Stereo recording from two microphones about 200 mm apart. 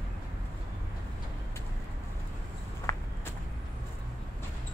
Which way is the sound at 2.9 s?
15° left (ahead or behind).